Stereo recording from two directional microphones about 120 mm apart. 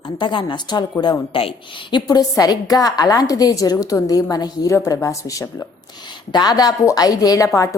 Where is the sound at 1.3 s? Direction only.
50° left (ahead or behind).